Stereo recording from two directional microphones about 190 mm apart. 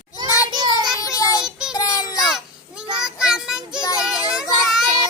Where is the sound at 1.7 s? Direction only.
20° left (ahead or behind).